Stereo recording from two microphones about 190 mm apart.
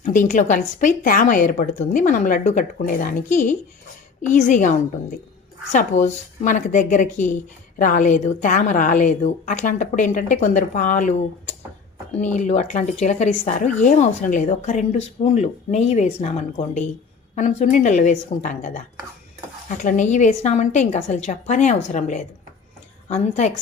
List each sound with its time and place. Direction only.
0.0 s a woman's voice: 45° left (ahead or behind)